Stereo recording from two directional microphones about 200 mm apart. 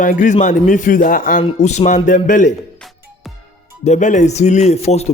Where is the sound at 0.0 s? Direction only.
40° left (ahead or behind).